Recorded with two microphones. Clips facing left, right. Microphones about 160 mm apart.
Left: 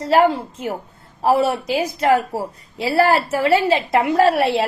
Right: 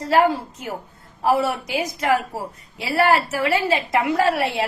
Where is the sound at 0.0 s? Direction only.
30° left (ahead or behind).